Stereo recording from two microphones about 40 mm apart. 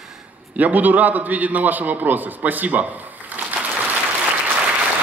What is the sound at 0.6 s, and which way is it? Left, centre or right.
A man's voice, right.